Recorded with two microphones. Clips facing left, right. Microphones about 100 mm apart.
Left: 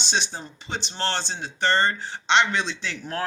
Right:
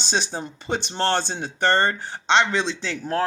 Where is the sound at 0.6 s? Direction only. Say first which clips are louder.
Right 5 dB; 50° right (ahead or behind).